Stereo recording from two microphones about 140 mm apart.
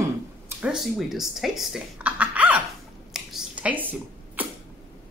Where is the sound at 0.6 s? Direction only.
5° right (ahead or behind).